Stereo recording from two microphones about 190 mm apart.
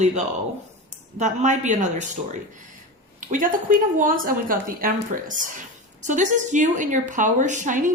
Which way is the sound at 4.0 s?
45° right (ahead or behind).